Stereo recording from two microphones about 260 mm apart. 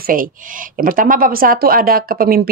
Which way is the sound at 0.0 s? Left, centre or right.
Right.